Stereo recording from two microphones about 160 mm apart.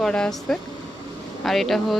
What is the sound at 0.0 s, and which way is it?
Speech, 5° left (ahead or behind).